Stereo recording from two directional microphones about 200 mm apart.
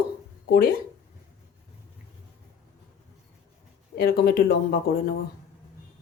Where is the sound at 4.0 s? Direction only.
50° left (ahead or behind).